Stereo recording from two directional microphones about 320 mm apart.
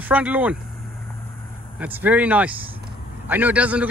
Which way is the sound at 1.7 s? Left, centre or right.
Centre.